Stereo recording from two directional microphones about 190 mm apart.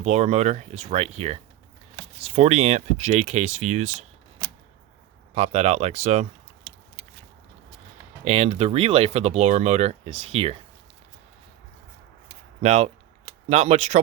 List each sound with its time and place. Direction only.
0.0 s speech: 35° right (ahead or behind)
5.3 s speech: 35° right (ahead or behind)
8.2 s speech: 35° right (ahead or behind)
12.6 s speech: 35° right (ahead or behind)